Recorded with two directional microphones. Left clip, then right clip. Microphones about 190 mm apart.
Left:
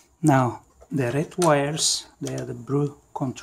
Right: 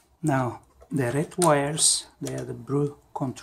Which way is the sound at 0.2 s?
30° left (ahead or behind).